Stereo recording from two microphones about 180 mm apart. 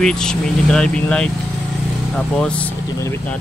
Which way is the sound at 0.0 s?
5° left (ahead or behind).